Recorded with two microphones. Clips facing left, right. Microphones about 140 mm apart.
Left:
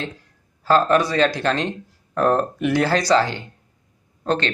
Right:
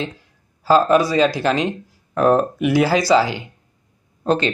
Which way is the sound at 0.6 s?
5° right (ahead or behind).